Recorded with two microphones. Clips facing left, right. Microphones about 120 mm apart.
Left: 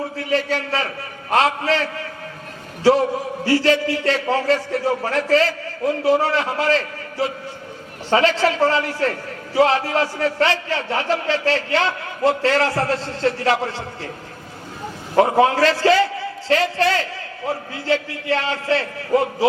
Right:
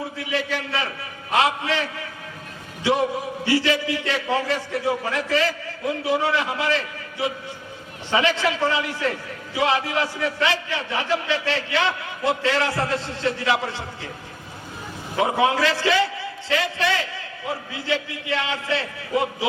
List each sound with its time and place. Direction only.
0.2 s a man's voice: 40° left (ahead or behind)
3.4 s a man's voice: 40° left (ahead or behind)
8.1 s a man's voice: 40° left (ahead or behind)
15.1 s a man's voice: 40° left (ahead or behind)